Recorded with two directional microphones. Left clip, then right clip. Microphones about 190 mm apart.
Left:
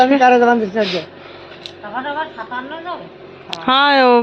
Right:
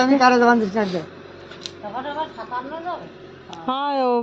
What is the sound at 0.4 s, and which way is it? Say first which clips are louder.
Speech: left 3 dB; 45° right (ahead or behind).